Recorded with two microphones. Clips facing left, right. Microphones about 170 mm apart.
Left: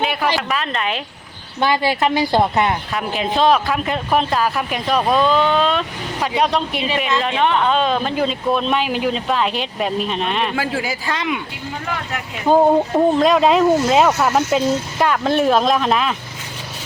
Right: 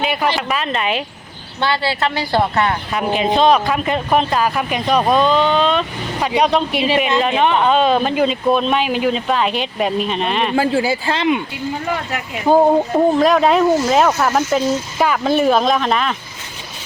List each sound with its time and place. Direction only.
0.0 s a sound: centre (ahead or behind)
0.4 s speech: 5° right (ahead or behind)
1.6 s speech: 15° left (ahead or behind)
2.9 s speech: centre (ahead or behind)
10.5 s speech: 30° right (ahead or behind)
12.5 s speech: 10° right (ahead or behind)